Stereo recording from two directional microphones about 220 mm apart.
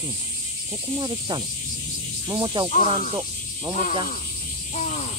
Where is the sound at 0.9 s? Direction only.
20° right (ahead or behind).